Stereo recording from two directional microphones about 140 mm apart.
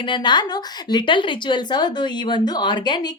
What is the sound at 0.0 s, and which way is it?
A woman's voice, 35° left (ahead or behind).